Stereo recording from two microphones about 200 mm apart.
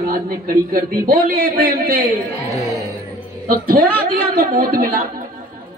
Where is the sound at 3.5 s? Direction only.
45° right (ahead or behind).